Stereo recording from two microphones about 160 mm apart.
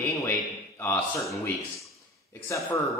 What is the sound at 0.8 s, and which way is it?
Speech, 15° left (ahead or behind).